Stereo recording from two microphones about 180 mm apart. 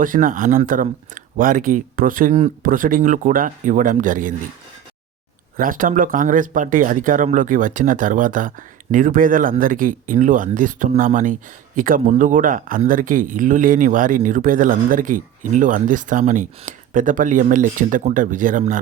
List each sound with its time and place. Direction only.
0.0 s speech: 50° right (ahead or behind)
5.5 s speech: 50° right (ahead or behind)